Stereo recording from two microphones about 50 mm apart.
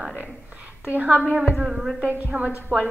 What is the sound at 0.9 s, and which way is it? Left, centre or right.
Speech, right.